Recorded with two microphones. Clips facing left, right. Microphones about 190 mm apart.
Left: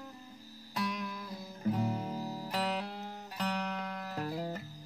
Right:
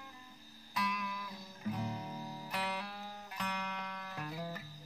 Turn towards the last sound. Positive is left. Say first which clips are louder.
# left 6 dB
turn(degrees=35)  # may be behind; listen again after turning